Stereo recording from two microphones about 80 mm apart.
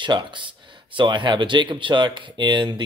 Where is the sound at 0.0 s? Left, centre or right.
Right.